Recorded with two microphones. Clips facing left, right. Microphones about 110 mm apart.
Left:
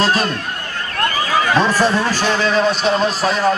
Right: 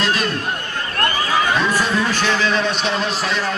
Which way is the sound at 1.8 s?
35° left (ahead or behind).